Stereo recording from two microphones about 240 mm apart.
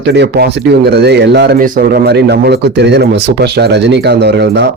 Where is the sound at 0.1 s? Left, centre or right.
Right.